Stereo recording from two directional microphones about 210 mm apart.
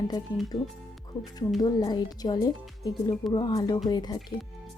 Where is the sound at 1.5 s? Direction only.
20° left (ahead or behind).